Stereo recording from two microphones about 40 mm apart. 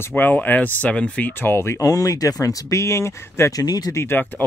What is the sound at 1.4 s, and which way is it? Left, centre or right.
Speech, left.